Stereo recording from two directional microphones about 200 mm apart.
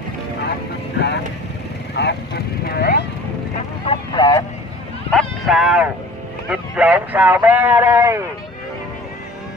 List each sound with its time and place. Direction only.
0.9 s vehicle: 55° left (ahead or behind)
3.8 s vehicle: 25° left (ahead or behind)
5.1 s vehicle: centre (ahead or behind)
6.5 s a man's voice: 5° right (ahead or behind)